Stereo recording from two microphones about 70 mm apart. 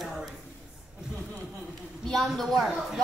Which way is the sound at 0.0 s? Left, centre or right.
Centre.